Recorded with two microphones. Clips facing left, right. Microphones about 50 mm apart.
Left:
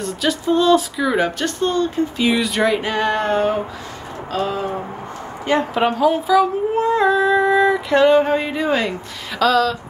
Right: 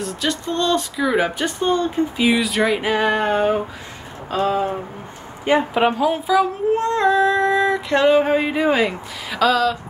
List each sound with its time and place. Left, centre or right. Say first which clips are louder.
0.0 s speech: left 3 dB; centre
2.2 s a sound: even; centre
5.4 s speech: right 1 dB; centre